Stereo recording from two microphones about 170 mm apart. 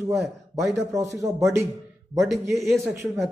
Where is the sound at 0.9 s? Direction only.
20° right (ahead or behind).